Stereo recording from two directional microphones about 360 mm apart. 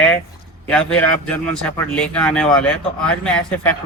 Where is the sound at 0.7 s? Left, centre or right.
Centre.